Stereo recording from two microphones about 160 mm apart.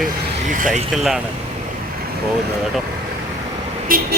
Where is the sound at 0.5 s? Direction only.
55° right (ahead or behind).